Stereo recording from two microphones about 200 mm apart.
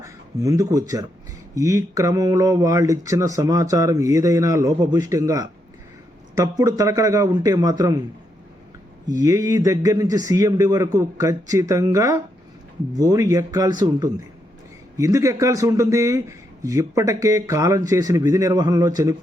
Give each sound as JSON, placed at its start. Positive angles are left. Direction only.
{"t": 0.0, "sound": "speech", "side_deg": -15}
{"t": 9.0, "sound": "speech", "side_deg": -15}